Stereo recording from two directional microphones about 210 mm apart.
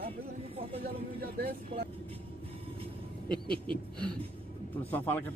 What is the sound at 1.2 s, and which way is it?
Vehicle, 45° right (ahead or behind).